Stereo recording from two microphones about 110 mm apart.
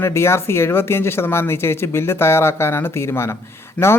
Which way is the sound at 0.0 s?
25° left (ahead or behind).